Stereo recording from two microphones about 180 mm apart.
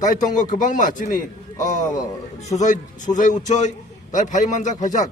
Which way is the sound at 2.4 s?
40° left (ahead or behind).